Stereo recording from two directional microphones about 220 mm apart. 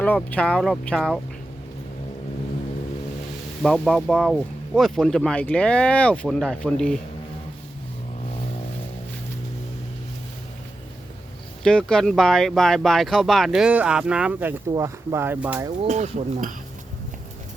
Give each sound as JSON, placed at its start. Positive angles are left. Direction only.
{"t": 0.0, "sound": "speech", "side_deg": 5}
{"t": 3.6, "sound": "speech", "side_deg": 0}
{"t": 11.6, "sound": "speech", "side_deg": 5}
{"t": 15.8, "sound": "speech", "side_deg": -30}